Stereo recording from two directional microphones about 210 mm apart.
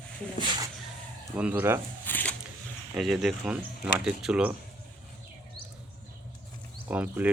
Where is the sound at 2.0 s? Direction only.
10° left (ahead or behind).